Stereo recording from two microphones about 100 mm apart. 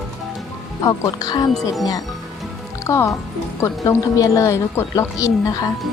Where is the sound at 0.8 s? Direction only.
40° left (ahead or behind).